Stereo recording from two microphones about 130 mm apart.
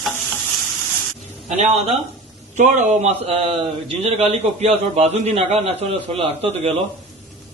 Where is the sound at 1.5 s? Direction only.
55° right (ahead or behind).